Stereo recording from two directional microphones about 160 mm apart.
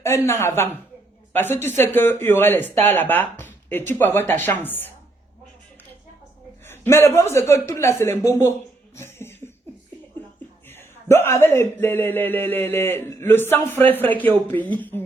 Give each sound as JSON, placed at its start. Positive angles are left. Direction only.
{"t": 0.0, "sound": "speech", "side_deg": 15}
{"t": 6.7, "sound": "a man's voice", "side_deg": 15}
{"t": 9.0, "sound": "a sound", "side_deg": 15}
{"t": 10.7, "sound": "speech", "side_deg": 15}